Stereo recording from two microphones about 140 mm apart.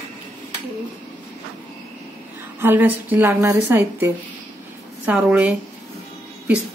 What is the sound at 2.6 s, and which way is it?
A woman's voice, 15° right (ahead or behind).